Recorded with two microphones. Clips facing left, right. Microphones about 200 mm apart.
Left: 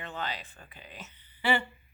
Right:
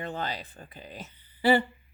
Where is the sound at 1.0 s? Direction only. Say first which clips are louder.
Right 7 dB; 35° right (ahead or behind).